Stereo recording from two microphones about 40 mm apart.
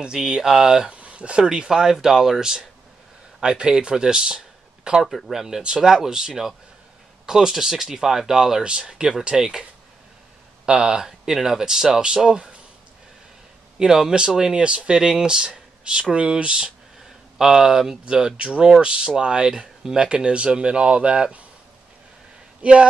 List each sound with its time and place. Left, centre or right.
0.0 s speech: centre
0.9 s a sound: right
1.4 s speech: centre
3.3 s speech: right
5.0 s speech: centre
6.0 s speech: centre
8.6 s speech: right
13.7 s speech: centre
17.4 s speech: centre
19.8 s speech: centre
20.1 s speech: right
22.6 s speech: right